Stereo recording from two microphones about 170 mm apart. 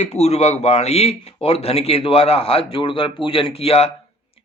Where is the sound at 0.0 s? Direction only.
40° left (ahead or behind).